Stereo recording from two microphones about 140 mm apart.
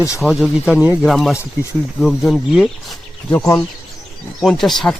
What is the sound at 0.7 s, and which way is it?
Speech, 10° right (ahead or behind).